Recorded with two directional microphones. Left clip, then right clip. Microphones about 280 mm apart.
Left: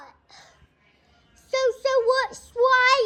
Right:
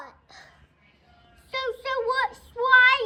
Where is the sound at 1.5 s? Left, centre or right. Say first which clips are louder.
Left 7 dB; left.